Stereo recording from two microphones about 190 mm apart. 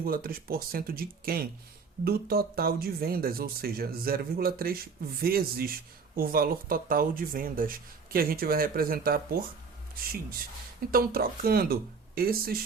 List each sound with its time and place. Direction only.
0.0 s speech: 50° right (ahead or behind)